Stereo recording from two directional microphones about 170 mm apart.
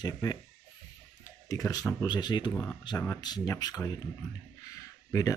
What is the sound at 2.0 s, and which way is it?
Speech, 25° left (ahead or behind).